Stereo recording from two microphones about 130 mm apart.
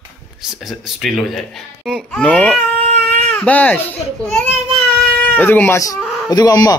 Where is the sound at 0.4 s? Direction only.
Centre (ahead or behind).